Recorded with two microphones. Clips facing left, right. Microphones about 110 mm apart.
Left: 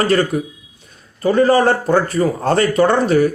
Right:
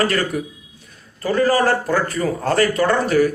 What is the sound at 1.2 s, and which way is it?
Speech, 25° left (ahead or behind).